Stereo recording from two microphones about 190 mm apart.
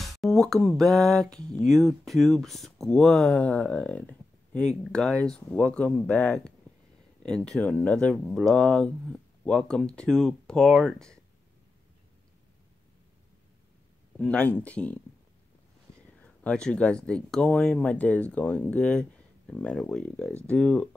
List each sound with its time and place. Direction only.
0.2 s speech: centre (ahead or behind)
14.1 s speech: 5° left (ahead or behind)
16.2 s speech: 5° left (ahead or behind)